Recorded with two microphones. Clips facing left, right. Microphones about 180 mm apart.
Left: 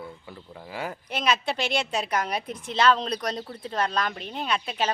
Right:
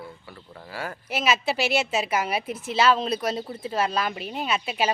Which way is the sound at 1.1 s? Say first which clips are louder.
Right 2 dB; 5° right (ahead or behind).